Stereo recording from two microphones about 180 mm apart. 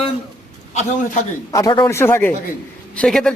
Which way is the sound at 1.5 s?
25° left (ahead or behind).